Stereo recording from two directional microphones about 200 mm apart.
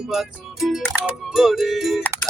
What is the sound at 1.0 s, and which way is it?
Music, centre (ahead or behind).